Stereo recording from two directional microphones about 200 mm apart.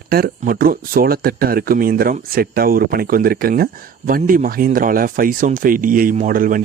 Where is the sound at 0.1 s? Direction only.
50° right (ahead or behind).